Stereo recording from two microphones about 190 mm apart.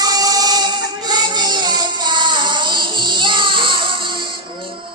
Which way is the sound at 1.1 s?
20° right (ahead or behind).